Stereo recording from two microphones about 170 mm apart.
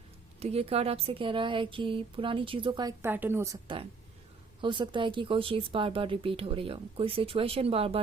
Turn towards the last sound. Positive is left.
turn(degrees=-35)  # may be behind; listen again after turning